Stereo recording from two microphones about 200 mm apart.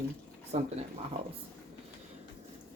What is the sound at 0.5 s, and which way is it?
Speech, 35° right (ahead or behind).